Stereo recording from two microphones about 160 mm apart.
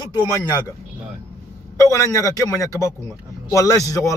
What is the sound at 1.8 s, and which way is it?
A man's voice, 20° left (ahead or behind).